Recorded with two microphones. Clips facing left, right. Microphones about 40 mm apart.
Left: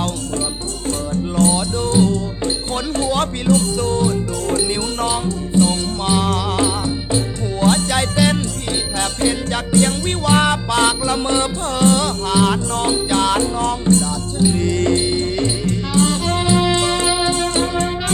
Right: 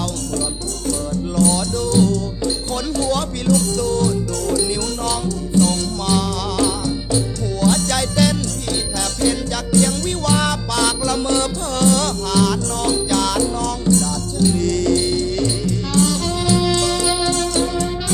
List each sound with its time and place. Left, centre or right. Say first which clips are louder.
0.9 s music: left 1 dB; left
3.4 s speech: right 1 dB; left
4.1 s music: even; left
5.0 s music: left 1 dB; left
8.2 s music: even; centre
9.7 s music: even; left